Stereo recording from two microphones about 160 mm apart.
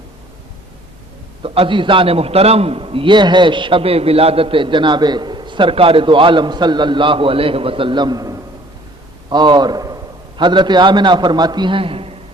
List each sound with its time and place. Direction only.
1.4 s a man's voice: 35° right (ahead or behind)